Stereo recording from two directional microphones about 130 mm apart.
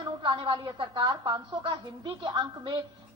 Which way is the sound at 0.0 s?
40° right (ahead or behind).